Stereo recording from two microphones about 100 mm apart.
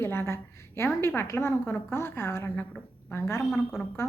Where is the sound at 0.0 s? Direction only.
25° left (ahead or behind).